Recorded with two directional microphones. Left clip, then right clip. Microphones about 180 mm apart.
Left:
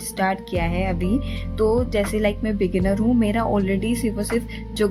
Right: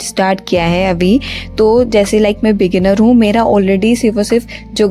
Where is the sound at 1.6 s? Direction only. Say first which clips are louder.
Right 11 dB; 40° right (ahead or behind).